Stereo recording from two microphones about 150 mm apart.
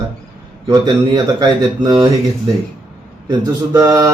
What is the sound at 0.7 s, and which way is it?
Speech, 25° right (ahead or behind).